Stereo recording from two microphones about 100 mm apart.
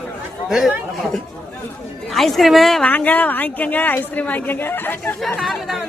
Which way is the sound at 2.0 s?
Centre (ahead or behind).